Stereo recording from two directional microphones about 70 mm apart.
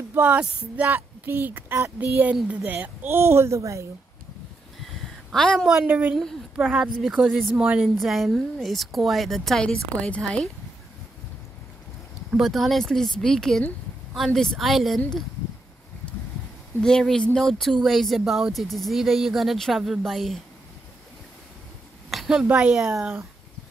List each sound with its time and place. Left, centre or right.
0.1 s speech: right
0.8 s a woman's voice: right
5.3 s speech: centre
5.8 s speech: right
6.5 s a woman's voice: centre
8.0 s speech: centre
12.3 s speech: centre
16.8 s speech: centre
22.1 s a sound: centre
22.4 s a woman's voice: centre